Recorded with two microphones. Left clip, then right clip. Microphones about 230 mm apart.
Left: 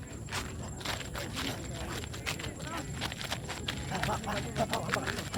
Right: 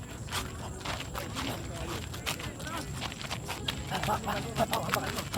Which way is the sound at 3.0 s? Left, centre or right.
Left.